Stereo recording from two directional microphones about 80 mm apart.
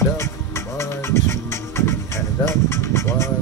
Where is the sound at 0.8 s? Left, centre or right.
Left.